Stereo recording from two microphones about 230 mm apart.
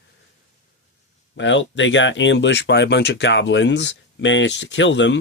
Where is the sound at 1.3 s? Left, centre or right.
Left.